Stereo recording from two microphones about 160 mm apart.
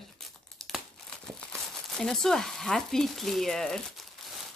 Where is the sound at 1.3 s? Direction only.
5° left (ahead or behind).